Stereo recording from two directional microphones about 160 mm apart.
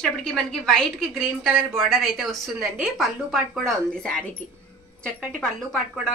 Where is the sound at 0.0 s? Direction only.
5° left (ahead or behind).